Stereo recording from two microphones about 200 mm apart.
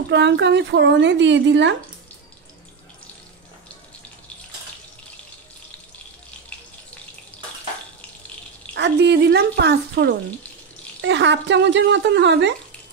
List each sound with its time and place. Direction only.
0.1 s speech: 60° right (ahead or behind)
8.7 s speech: 60° right (ahead or behind)